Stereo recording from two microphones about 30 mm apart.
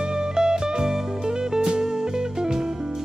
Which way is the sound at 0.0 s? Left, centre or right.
Right.